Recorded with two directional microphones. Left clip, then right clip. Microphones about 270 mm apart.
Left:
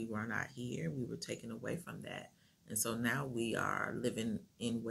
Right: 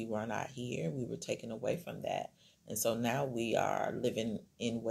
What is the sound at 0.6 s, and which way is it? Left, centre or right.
Speech, centre.